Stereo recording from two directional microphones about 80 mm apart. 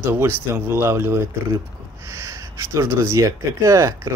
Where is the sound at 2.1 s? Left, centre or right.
Right.